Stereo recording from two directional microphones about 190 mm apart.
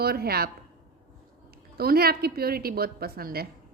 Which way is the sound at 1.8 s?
55° right (ahead or behind).